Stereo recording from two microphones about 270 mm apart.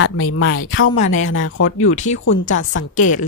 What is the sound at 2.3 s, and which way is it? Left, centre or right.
Speech, left.